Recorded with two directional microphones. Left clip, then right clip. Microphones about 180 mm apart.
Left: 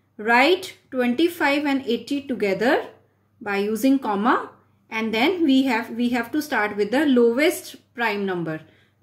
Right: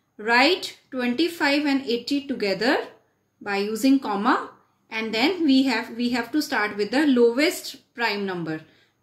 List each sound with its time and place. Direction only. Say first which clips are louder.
0.2 s a woman's voice: left 2 dB; 20° left (ahead or behind)